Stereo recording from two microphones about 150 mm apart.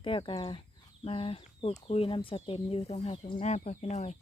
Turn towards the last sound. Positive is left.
turn(degrees=50)  # may be behind; listen again after turning